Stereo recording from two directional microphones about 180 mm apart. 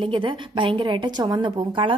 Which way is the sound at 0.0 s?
30° right (ahead or behind).